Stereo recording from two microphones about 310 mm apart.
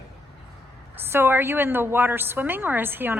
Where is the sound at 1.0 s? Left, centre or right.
Centre.